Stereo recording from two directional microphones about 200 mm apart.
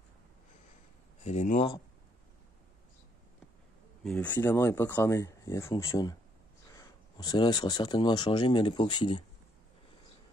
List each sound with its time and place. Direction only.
1.2 s speech: 35° left (ahead or behind)
4.1 s speech: 10° left (ahead or behind); by 9.2 s 25° left (ahead or behind)